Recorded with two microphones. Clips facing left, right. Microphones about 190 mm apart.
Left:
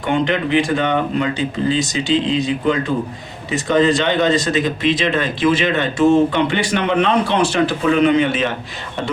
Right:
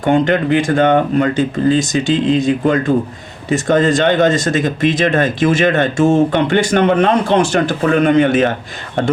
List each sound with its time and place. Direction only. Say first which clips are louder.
0.0 s speech: right 5 dB; 45° right (ahead or behind)